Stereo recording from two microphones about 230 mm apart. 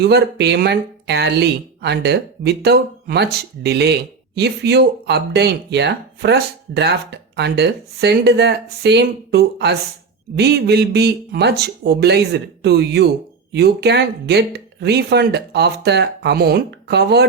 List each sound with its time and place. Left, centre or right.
0.0 s speech: right